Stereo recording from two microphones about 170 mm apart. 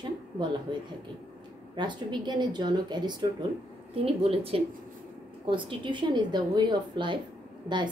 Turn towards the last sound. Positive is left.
turn(degrees=-25)  # may be behind; listen again after turning